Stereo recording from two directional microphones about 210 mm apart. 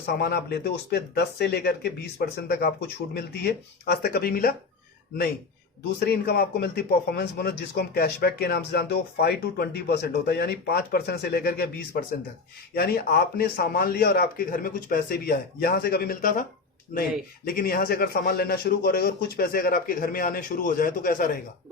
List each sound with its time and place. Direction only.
0.0 s speech: 50° left (ahead or behind)
6.1 s speech: 50° left (ahead or behind)